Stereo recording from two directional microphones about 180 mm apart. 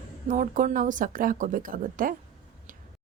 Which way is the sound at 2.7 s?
50° right (ahead or behind).